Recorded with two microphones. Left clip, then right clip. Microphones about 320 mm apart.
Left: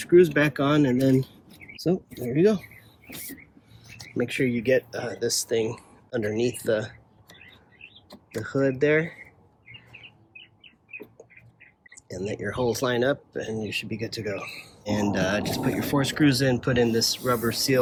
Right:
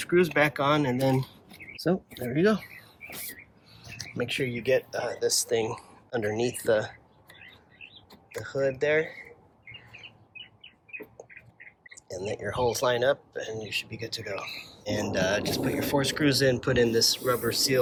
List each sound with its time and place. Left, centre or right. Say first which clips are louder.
0.0 s speech: left 4 dB; right
4.4 s speech: left 3 dB; centre
8.4 s speech: left 3 dB; centre
12.0 s speech: left 2 dB; centre